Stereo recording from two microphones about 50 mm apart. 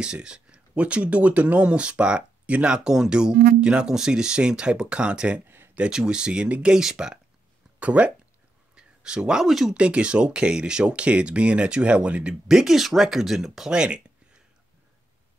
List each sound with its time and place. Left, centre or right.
0.0 s speech: centre
7.8 s speech: right; by 9.8 s centre
9.8 s speech: right
12.4 s speech: centre
13.7 s a sound: centre